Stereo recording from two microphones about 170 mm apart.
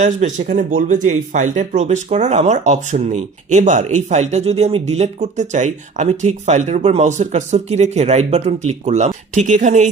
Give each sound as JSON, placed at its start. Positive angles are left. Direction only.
{"t": 0.0, "sound": "speech", "side_deg": -45}